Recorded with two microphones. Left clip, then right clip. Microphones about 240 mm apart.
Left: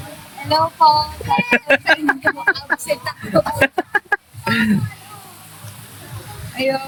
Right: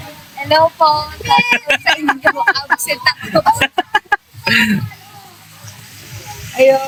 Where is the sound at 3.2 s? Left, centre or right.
Right.